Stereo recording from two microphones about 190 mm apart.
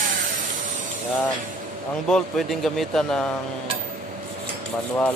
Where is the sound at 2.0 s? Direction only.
Centre (ahead or behind).